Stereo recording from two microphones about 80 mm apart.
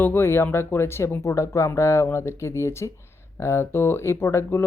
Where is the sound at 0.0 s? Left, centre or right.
Left.